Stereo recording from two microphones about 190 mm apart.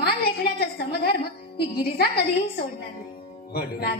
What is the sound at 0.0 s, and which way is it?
Music, 55° left (ahead or behind).